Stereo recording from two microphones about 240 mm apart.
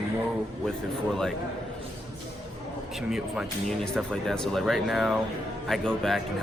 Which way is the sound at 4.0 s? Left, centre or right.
Centre.